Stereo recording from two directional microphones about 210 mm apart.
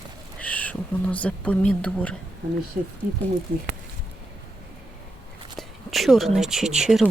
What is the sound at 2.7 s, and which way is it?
Speech, 35° right (ahead or behind).